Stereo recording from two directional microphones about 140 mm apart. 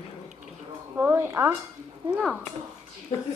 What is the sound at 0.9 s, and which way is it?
Speech, 15° right (ahead or behind).